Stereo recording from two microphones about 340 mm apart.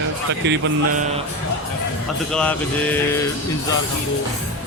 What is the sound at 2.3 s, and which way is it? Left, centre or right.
Mantra, centre.